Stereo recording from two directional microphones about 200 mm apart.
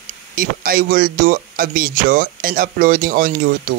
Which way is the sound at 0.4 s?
45° right (ahead or behind).